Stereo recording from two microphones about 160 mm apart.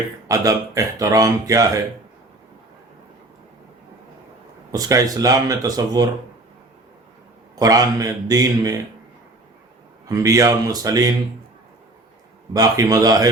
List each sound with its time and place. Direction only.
0.3 s speech: 20° right (ahead or behind)
4.7 s speech: 20° right (ahead or behind)
7.6 s speech: 20° right (ahead or behind)
10.1 s speech: 20° right (ahead or behind)
12.5 s speech: 20° right (ahead or behind)